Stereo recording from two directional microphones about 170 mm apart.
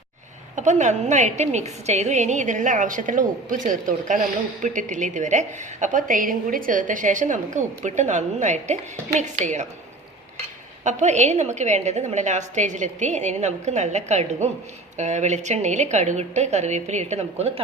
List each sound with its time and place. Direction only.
0.5 s a woman's voice: 45° right (ahead or behind)
10.8 s a woman's voice: 45° right (ahead or behind)